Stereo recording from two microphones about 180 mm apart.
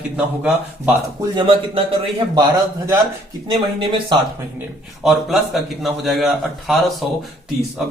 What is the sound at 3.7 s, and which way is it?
Speech, 30° right (ahead or behind).